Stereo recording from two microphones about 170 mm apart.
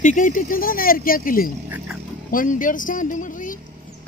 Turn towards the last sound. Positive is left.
turn(degrees=50)  # may be behind; listen again after turning